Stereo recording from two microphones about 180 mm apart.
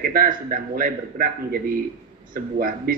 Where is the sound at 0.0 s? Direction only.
50° right (ahead or behind).